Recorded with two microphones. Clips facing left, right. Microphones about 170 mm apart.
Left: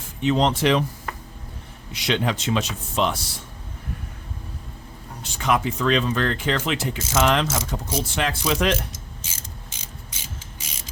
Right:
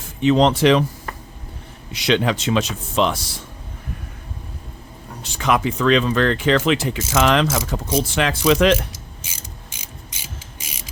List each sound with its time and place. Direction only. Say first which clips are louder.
0.2 s speech: right 5 dB; 90° right
1.9 s speech: right 5 dB; 90° right
5.2 s speech: right 3 dB; 90° right